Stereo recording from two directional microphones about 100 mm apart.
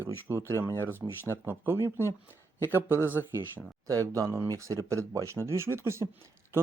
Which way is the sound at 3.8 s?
35° right (ahead or behind).